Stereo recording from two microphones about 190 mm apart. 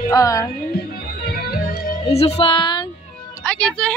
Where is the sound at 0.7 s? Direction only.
50° left (ahead or behind).